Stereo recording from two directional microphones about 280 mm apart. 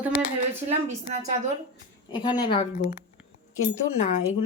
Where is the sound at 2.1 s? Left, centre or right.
Centre.